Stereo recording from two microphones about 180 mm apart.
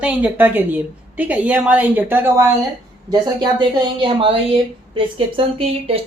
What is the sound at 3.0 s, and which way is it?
Speech, 25° right (ahead or behind).